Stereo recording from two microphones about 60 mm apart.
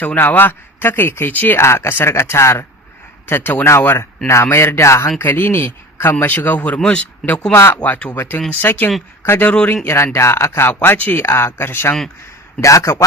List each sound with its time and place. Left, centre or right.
0.0 s speech: left
1.5 s speech: left
3.2 s speech: left
3.7 s speech: left
5.2 s speech: left
6.7 s speech: centre
7.5 s speech: left
10.7 s speech: left
11.2 s speech: left
12.5 s a man's voice: left